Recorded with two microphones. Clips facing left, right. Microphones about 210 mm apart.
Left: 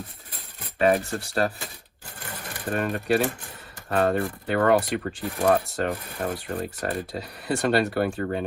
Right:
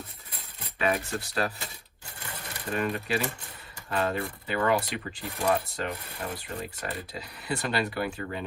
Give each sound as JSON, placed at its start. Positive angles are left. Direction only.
{"t": 0.8, "sound": "rub", "side_deg": 45}
{"t": 2.5, "sound": "speech", "side_deg": 55}
{"t": 5.7, "sound": "rub", "side_deg": 50}